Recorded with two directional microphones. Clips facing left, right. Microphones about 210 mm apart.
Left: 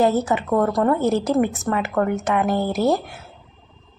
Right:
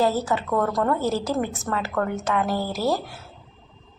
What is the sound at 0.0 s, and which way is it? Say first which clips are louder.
A woman's voice: left 4 dB; 20° left (ahead or behind).